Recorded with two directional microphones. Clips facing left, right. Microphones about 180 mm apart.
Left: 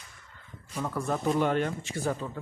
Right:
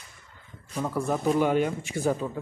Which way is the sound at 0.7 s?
10° right (ahead or behind).